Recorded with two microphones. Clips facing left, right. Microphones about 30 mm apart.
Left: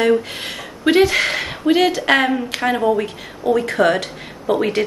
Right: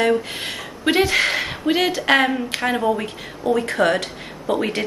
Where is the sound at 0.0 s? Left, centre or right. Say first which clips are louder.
Left 3 dB; centre.